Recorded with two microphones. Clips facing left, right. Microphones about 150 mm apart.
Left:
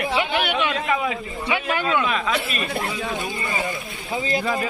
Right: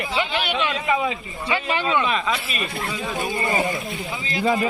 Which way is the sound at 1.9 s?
Centre (ahead or behind).